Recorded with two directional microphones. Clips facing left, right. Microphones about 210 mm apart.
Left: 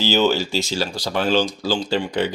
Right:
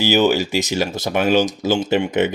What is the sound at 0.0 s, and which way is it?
Speech, 15° right (ahead or behind).